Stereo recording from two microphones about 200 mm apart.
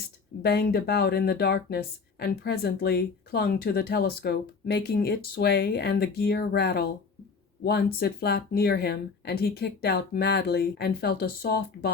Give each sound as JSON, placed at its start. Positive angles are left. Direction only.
{"t": 0.4, "sound": "speech", "side_deg": 50}